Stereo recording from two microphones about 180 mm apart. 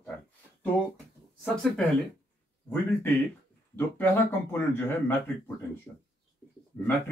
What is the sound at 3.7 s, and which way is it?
Speech, 10° left (ahead or behind).